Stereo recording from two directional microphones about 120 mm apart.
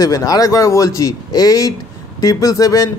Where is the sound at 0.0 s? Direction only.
30° left (ahead or behind).